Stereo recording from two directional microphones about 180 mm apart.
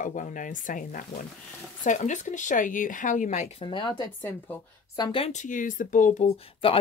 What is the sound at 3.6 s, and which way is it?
Speech, 25° left (ahead or behind).